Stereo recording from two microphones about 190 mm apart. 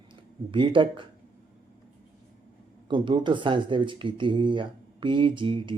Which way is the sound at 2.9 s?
25° right (ahead or behind).